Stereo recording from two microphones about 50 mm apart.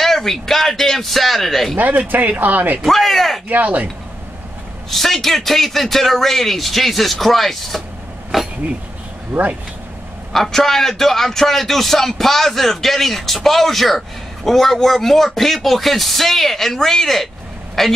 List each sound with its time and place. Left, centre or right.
0.0 s a man's voice: centre
1.8 s speech: right
2.8 s speech: centre
3.4 s speech: right
4.9 s a man's voice: centre
9.3 s speech: right
10.3 s a man's voice: centre